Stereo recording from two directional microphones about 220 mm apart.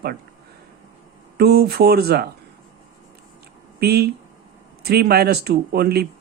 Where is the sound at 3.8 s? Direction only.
45° right (ahead or behind).